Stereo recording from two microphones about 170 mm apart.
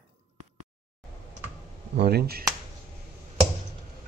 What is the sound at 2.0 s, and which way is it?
Speech, 70° right (ahead or behind).